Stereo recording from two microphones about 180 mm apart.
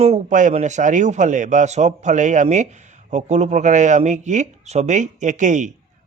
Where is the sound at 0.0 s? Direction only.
40° right (ahead or behind).